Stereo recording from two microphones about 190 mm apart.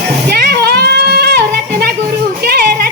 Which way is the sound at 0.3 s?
60° right (ahead or behind).